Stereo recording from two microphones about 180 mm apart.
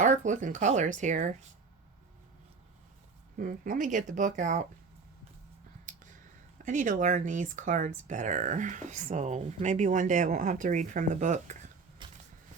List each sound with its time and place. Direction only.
0.0 s speech: 45° right (ahead or behind)
3.3 s speech: 50° right (ahead or behind)
5.9 s a sound: 45° right (ahead or behind)
6.7 s speech: 45° right (ahead or behind)
12.0 s vehicle: 25° right (ahead or behind)